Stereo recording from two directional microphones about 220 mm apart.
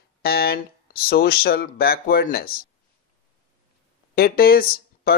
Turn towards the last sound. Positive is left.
turn(degrees=40)  # may be behind; listen again after turning